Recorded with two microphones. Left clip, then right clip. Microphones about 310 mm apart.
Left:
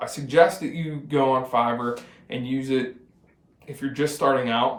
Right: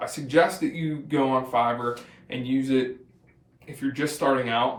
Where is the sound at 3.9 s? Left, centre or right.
Centre.